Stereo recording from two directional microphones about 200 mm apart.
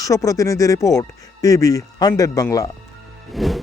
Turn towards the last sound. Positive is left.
turn(degrees=0)  # may be behind; listen again after turning